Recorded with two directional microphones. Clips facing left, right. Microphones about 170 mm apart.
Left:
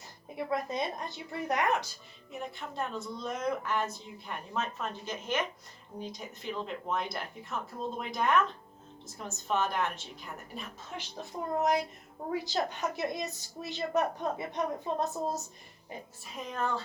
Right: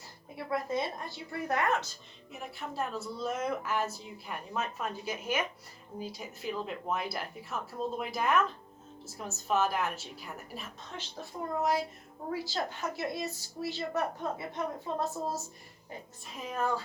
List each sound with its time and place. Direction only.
0.3 s a woman's voice: 20° left (ahead or behind)
2.3 s a woman's voice: 5° right (ahead or behind)
10.9 s a woman's voice: 20° left (ahead or behind)
16.2 s a woman's voice: centre (ahead or behind)